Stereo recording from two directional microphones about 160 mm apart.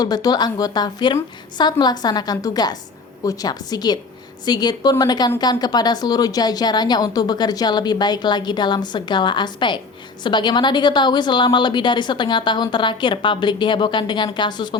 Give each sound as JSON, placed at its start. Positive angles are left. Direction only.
{"t": 0.0, "sound": "a woman's voice", "side_deg": 25}